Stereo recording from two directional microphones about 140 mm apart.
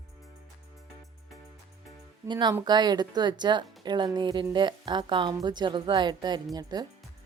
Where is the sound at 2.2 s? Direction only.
30° right (ahead or behind).